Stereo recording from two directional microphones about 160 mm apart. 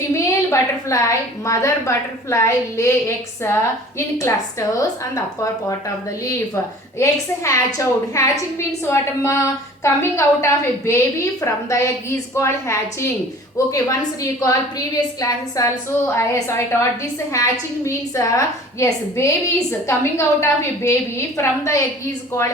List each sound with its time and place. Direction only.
0.5 s a woman's voice: 20° left (ahead or behind)
7.0 s a woman's voice: 20° left (ahead or behind)